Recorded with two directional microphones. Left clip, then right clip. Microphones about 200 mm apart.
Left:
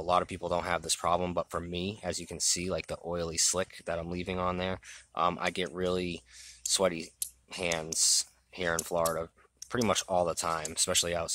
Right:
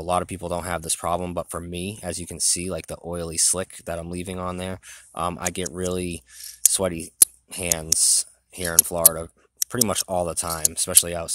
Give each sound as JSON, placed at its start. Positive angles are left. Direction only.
{"t": 0.0, "sound": "speech", "side_deg": -45}